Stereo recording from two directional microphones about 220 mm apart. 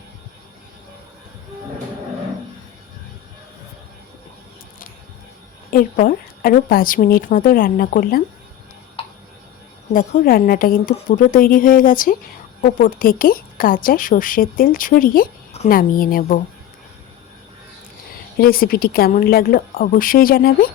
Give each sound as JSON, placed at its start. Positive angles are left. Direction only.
{"t": 5.7, "sound": "a woman's voice", "side_deg": 40}
{"t": 9.0, "sound": "a sound", "side_deg": 25}
{"t": 9.9, "sound": "a woman's voice", "side_deg": 40}
{"t": 18.3, "sound": "a woman's voice", "side_deg": 45}